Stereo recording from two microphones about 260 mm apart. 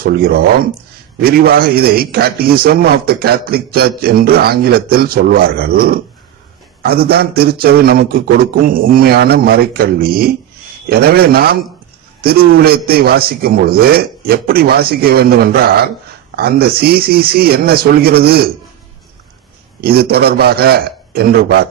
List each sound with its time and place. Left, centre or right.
0.0 s a man's voice: right
19.8 s a man's voice: right